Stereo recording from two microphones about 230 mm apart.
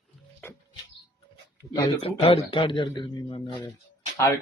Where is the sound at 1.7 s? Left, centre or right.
Left.